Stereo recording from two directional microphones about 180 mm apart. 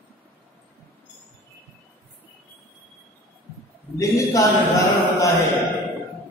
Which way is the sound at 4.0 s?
15° left (ahead or behind).